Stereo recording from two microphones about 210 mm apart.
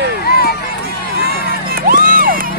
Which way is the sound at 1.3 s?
45° right (ahead or behind).